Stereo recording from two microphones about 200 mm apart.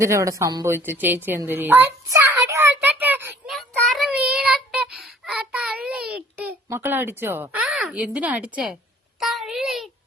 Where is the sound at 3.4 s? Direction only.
Centre (ahead or behind).